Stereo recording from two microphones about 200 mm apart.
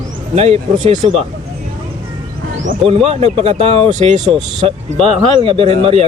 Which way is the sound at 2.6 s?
35° right (ahead or behind).